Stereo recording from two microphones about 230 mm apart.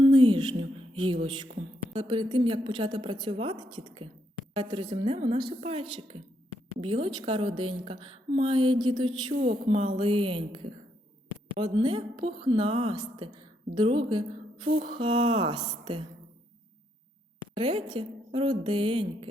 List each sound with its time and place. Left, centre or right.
0.0 s speech: centre
1.5 s a sound: right
2.0 s a woman's voice: right
17.5 s a woman's voice: right